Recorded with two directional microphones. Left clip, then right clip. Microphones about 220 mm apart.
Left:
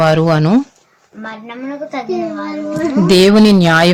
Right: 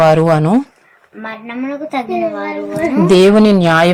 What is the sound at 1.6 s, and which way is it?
Speech, 35° right (ahead or behind).